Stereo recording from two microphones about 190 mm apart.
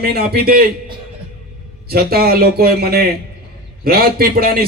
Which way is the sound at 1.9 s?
55° right (ahead or behind).